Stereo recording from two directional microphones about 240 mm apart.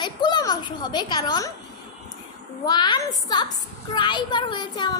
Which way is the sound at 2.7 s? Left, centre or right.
Centre.